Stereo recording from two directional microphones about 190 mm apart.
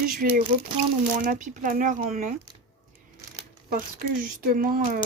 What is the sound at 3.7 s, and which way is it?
Speech, 45° right (ahead or behind).